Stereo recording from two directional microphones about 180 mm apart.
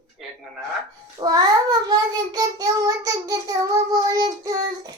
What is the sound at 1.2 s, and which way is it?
Child singing, 20° right (ahead or behind).